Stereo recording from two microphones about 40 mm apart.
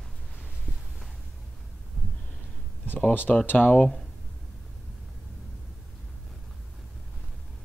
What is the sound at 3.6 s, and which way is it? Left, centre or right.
Speech, left.